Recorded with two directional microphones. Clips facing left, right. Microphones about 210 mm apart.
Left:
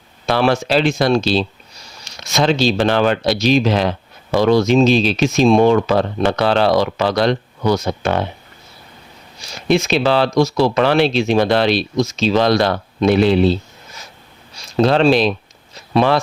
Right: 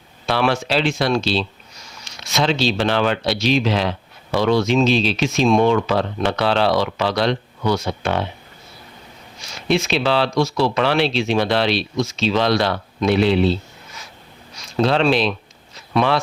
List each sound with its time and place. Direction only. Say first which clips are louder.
0.3 s speech: left 4 dB; 40° left (ahead or behind)
9.6 s speech: left 4 dB; 45° left (ahead or behind)
14.5 s a sound: left 4 dB; 40° left (ahead or behind)